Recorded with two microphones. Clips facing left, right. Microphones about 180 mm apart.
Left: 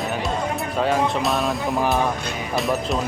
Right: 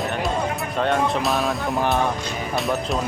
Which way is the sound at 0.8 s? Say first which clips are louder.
Even; 5° left (ahead or behind).